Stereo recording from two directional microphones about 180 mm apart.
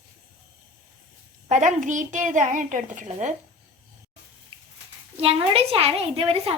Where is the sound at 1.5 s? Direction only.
45° right (ahead or behind).